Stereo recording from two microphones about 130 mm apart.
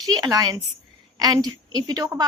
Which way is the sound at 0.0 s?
30° right (ahead or behind).